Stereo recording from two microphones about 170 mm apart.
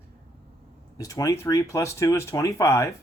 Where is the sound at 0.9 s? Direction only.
20° left (ahead or behind).